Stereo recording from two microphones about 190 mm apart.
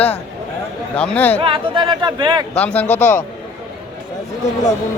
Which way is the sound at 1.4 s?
25° right (ahead or behind).